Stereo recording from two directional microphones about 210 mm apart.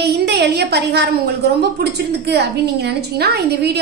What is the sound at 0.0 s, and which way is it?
A woman's voice, 50° right (ahead or behind).